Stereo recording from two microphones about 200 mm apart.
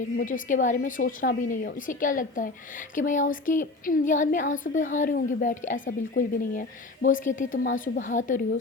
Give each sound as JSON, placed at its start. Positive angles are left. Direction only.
{"t": 0.2, "sound": "a woman's voice", "side_deg": 40}